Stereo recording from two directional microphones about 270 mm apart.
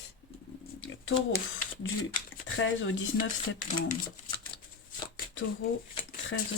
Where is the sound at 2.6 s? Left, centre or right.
Left.